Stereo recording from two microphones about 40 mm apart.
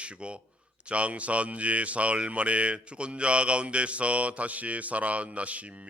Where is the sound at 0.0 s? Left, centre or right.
Right.